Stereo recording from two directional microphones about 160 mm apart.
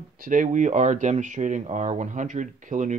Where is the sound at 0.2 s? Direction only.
55° right (ahead or behind).